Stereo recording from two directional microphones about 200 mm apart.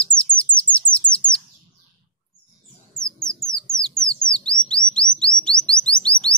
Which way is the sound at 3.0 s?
5° left (ahead or behind).